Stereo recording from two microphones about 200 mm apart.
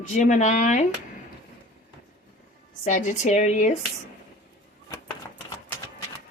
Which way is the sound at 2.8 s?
40° left (ahead or behind).